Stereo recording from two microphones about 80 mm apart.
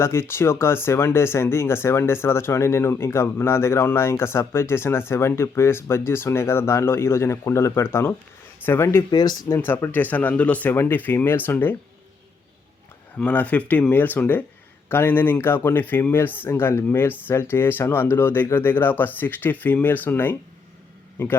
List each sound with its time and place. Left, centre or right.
0.0 s speech: left
9.0 s speech: left
9.6 s speech: left
13.1 s speech: centre